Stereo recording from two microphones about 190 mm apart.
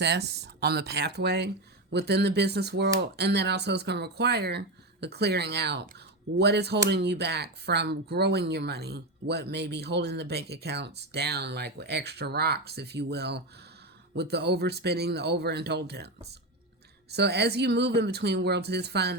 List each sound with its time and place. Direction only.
0.0 s speech: 60° right (ahead or behind)